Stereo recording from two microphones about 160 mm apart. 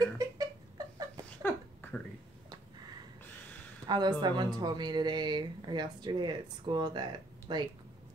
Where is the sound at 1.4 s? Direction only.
15° left (ahead or behind).